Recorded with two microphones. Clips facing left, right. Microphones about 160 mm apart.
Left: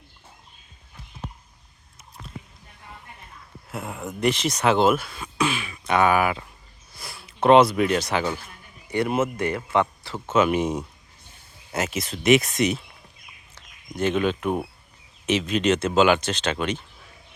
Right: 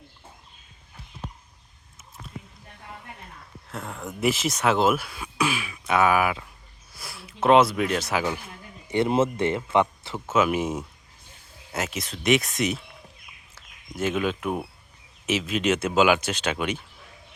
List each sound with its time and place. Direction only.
3.7 s speech: 10° left (ahead or behind)
4.2 s speech: 5° right (ahead or behind)
8.9 s speech: 25° right (ahead or behind)
10.2 s speech: 5° right (ahead or behind)